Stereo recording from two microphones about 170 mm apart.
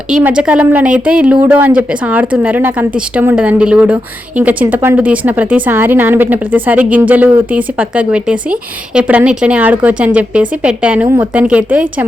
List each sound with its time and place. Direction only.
0.1 s a woman's voice: 5° right (ahead or behind)